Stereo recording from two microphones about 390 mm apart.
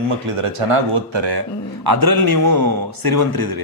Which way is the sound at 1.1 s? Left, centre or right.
Right.